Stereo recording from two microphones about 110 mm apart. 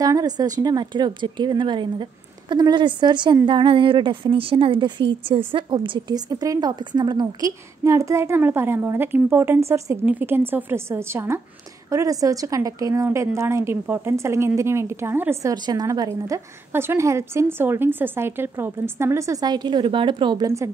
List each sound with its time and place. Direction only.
0.0 s a woman's voice: 35° right (ahead or behind)
7.8 s a woman's voice: 25° right (ahead or behind)
15.5 s a woman's voice: 40° right (ahead or behind)